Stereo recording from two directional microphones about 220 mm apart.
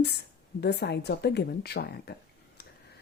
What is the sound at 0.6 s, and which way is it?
A woman's voice, 50° left (ahead or behind).